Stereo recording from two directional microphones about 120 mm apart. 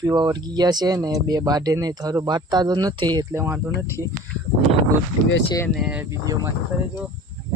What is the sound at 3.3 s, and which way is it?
Speech, 20° right (ahead or behind).